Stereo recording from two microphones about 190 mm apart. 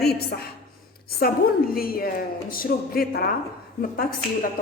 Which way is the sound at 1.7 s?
50° left (ahead or behind).